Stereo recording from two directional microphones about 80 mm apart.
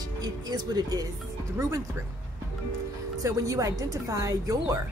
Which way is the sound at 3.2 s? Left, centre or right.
Right.